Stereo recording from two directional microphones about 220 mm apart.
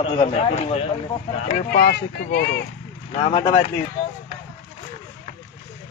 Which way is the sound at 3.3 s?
25° left (ahead or behind).